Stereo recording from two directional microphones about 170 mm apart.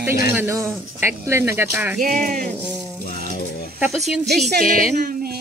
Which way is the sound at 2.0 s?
55° right (ahead or behind).